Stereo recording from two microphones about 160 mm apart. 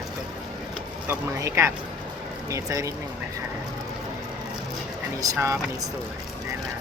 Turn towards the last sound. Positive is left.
turn(degrees=-20)  # may be behind; listen again after turning